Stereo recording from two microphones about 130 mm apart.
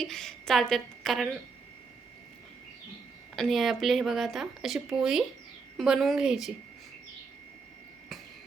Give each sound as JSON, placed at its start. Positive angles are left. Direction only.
{"t": 0.0, "sound": "speech", "side_deg": 5}
{"t": 3.3, "sound": "speech", "side_deg": 0}